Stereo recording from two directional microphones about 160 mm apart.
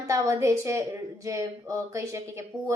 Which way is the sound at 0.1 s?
20° right (ahead or behind).